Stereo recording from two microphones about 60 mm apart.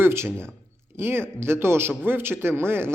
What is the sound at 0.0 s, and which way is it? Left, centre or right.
A man's voice, right.